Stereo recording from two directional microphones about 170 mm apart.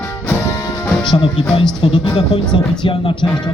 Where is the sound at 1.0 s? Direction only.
30° left (ahead or behind).